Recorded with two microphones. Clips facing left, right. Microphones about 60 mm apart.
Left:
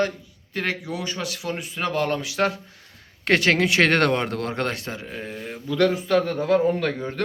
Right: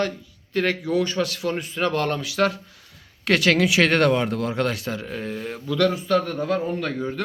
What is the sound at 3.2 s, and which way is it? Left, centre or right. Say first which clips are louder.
Speech: even; left.